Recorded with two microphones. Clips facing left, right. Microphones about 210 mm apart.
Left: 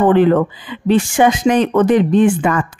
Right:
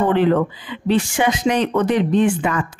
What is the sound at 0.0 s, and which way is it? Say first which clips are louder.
Speech: left 5 dB; 50° left (ahead or behind).